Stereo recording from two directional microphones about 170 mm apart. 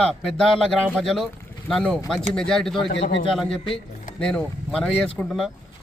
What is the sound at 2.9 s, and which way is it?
Speech, 90° left.